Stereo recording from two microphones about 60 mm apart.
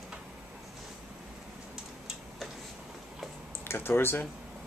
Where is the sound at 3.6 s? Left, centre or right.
Left.